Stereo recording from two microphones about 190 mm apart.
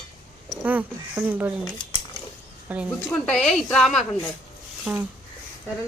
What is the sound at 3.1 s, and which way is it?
A woman's voice, 5° left (ahead or behind).